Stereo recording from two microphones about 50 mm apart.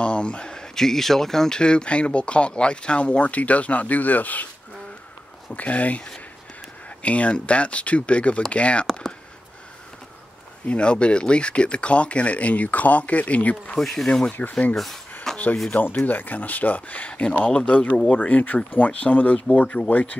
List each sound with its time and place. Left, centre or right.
0.0 s speech: left
5.5 s speech: left
10.7 s speech: left
13.7 s speech: centre
15.3 s a sound: centre
15.7 s speech: left